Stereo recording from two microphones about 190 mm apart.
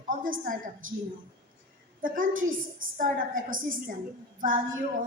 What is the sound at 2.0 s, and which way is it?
A woman's voice, 45° right (ahead or behind).